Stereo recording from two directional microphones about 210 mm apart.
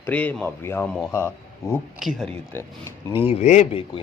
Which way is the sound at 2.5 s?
10° left (ahead or behind).